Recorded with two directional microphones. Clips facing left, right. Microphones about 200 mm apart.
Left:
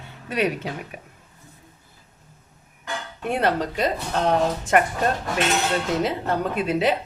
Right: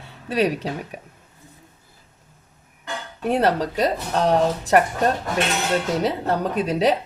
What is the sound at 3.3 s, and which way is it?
Speech, 35° right (ahead or behind).